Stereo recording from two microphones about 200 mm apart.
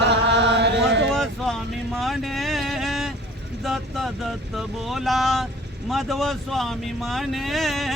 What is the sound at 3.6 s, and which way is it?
Boat, centre (ahead or behind).